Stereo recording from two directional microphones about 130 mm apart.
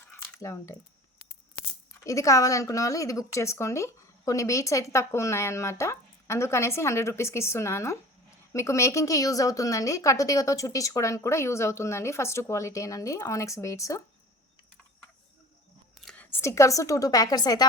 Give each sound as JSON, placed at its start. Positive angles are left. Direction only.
{"t": 0.1, "sound": "a sound", "side_deg": 20}
{"t": 2.0, "sound": "speech", "side_deg": 25}
{"t": 16.0, "sound": "a woman's voice", "side_deg": 10}